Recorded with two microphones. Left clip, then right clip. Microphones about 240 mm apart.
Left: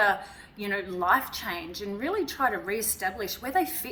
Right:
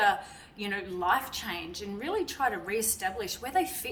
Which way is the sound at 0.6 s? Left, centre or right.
Centre.